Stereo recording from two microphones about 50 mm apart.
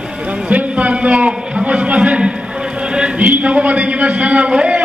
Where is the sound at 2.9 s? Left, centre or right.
Right.